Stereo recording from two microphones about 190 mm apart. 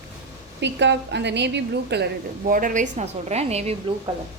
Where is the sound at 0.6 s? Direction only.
65° right (ahead or behind); by 3.7 s 35° right (ahead or behind).